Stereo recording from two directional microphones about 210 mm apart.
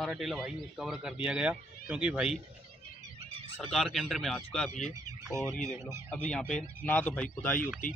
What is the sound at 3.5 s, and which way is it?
Speech, centre (ahead or behind).